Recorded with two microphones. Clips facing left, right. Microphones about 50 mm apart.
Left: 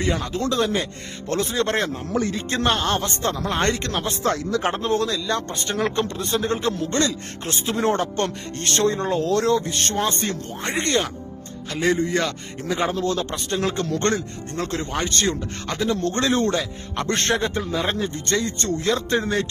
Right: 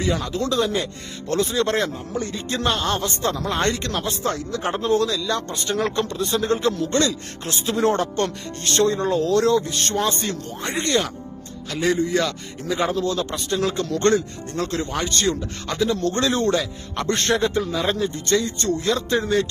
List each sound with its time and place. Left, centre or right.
0.0 s speech: left
2.1 s a man's voice: left
2.5 s speech: left
4.2 s speech: left
4.6 s speech: left
5.7 s speech: left
6.1 s speech: left
8.5 s speech: left
13.1 s speech: left
14.1 s speech: left
16.6 s a man's voice: centre
17.1 s speech: left
18.9 s speech: left